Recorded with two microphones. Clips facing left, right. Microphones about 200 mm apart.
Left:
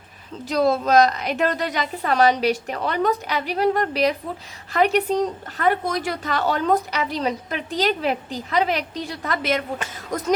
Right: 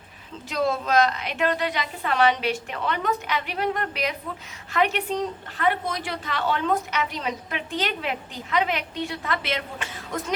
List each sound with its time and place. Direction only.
0.4 s speech: 40° left (ahead or behind)